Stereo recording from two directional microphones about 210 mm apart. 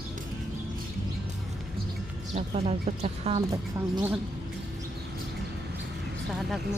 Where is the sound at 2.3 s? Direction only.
30° right (ahead or behind).